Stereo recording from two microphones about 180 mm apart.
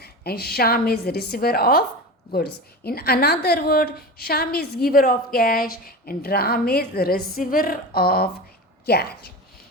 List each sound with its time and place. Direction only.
0.0 s a woman's voice: 60° left (ahead or behind)